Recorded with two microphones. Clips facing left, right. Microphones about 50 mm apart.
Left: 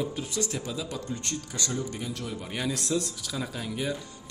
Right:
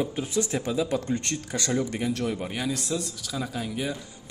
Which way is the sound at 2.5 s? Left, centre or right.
Centre.